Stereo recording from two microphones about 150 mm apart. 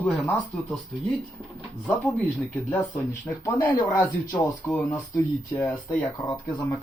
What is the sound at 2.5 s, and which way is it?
Speech, 10° left (ahead or behind).